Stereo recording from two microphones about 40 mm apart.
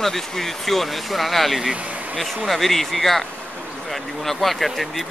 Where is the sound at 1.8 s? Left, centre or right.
Right.